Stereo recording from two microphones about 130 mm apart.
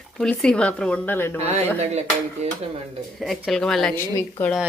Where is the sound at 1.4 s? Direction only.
55° right (ahead or behind).